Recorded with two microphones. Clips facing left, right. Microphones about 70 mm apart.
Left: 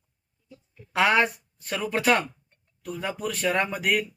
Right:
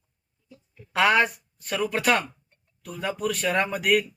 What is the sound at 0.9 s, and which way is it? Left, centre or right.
Speech, left.